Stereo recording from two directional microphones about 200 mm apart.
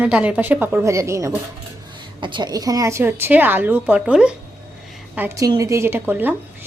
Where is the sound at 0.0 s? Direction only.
5° right (ahead or behind).